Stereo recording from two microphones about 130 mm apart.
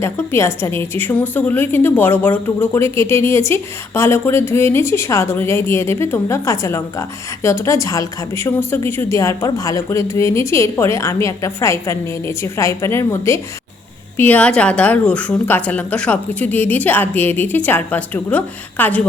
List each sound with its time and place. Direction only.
0.0 s a woman's voice: 20° left (ahead or behind)